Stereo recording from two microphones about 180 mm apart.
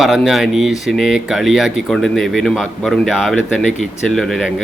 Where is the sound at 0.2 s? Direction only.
Centre (ahead or behind).